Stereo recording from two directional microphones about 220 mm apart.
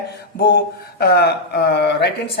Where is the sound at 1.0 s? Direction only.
45° left (ahead or behind).